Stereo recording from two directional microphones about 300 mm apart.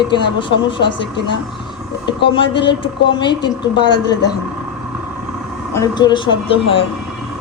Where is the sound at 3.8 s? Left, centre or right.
Left.